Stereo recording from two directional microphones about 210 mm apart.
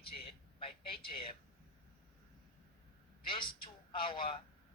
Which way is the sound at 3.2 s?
25° left (ahead or behind).